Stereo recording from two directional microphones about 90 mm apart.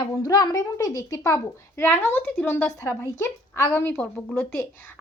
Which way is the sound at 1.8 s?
25° left (ahead or behind).